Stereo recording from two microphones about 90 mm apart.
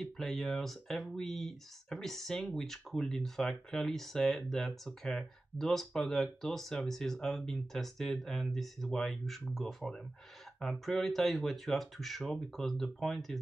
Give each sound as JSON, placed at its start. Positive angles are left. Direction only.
{"t": 0.0, "sound": "speech", "side_deg": 5}